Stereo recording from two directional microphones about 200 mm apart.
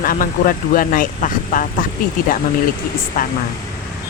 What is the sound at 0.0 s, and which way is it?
Speech, 45° left (ahead or behind).